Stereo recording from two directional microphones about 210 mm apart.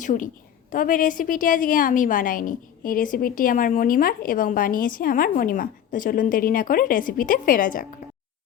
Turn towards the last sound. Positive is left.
turn(degrees=40)  # may be behind; listen again after turning